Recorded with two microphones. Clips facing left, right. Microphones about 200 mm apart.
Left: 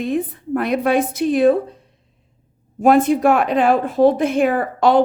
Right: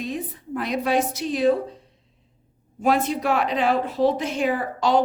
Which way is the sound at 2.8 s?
50° left (ahead or behind).